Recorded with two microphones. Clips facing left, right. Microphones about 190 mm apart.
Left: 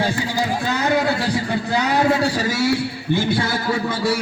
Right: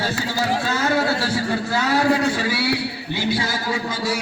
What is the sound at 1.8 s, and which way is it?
Speech, 20° left (ahead or behind).